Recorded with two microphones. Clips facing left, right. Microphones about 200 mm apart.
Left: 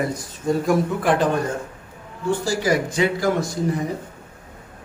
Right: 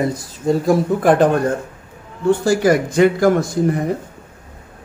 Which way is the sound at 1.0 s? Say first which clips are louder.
Right 6 dB; 45° right (ahead or behind).